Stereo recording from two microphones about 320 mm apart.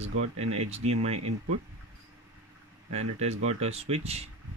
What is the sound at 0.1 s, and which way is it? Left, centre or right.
Speech, right.